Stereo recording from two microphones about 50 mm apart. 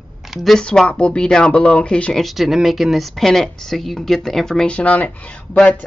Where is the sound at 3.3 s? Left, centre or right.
Centre.